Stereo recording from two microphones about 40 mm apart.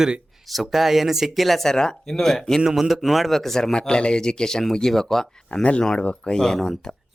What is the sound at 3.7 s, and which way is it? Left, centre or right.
Speech, left.